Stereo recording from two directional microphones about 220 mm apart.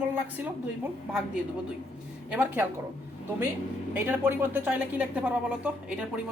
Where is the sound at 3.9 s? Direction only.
10° right (ahead or behind).